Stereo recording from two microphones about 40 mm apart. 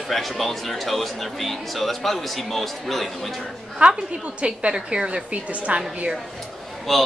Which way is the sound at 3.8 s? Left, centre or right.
Right.